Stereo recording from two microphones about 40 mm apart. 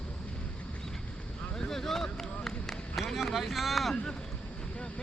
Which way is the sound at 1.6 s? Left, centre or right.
Centre.